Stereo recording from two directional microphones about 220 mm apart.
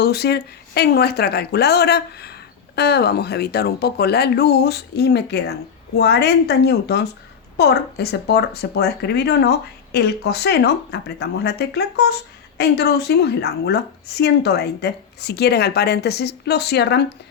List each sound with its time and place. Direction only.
0.0 s speech: 50° left (ahead or behind)